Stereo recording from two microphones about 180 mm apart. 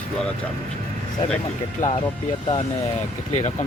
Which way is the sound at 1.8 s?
45° left (ahead or behind).